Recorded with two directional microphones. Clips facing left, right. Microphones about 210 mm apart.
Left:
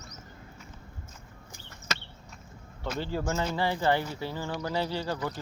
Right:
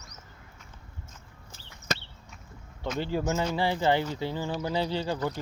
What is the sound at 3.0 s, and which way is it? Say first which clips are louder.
Speech: right 3 dB; 15° right (ahead or behind).